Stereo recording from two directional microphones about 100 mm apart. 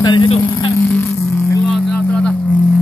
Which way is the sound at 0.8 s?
25° left (ahead or behind).